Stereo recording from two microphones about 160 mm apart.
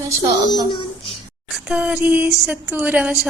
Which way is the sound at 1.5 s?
5° right (ahead or behind).